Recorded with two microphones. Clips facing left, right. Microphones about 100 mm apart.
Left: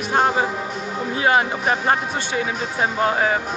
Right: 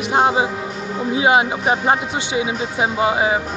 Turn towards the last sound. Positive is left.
turn(degrees=-15)  # may be behind; listen again after turning